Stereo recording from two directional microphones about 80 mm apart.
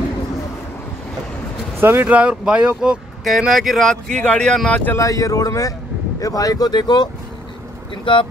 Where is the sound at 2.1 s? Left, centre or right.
Centre.